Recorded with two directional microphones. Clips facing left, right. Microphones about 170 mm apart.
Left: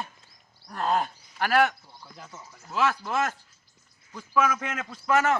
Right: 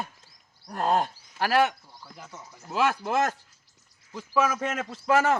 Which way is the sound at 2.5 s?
20° right (ahead or behind).